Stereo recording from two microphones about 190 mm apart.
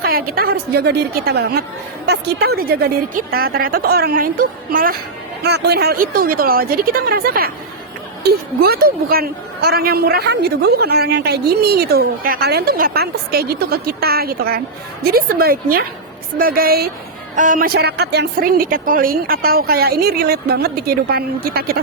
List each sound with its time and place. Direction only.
0.0 s a woman's voice: 50° right (ahead or behind)
5.4 s a woman's voice: 60° right (ahead or behind)